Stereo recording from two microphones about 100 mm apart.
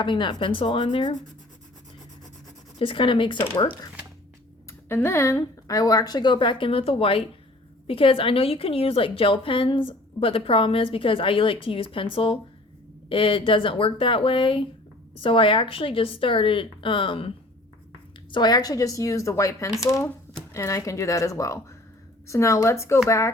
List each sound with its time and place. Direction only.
0.0 s speech: 50° left (ahead or behind)
2.7 s a woman's voice: 65° left (ahead or behind)
3.3 s a woman's voice: 20° left (ahead or behind)
4.9 s a woman's voice: 25° left (ahead or behind); by 17.3 s 65° left (ahead or behind)
18.3 s a woman's voice: 45° left (ahead or behind); by 23.3 s 30° left (ahead or behind)